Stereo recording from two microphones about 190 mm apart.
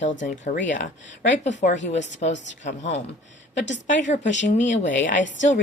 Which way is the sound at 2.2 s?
40° left (ahead or behind).